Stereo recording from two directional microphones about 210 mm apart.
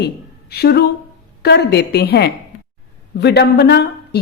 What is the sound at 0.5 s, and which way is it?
A woman's voice, 50° left (ahead or behind).